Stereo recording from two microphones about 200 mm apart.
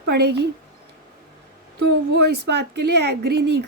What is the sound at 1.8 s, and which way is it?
Speech, 60° right (ahead or behind).